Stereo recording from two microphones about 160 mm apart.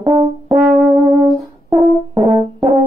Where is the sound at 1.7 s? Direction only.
20° right (ahead or behind).